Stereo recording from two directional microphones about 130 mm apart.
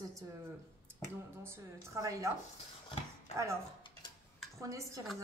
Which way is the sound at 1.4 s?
20° right (ahead or behind).